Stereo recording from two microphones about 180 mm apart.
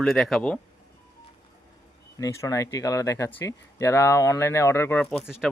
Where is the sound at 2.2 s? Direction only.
20° left (ahead or behind).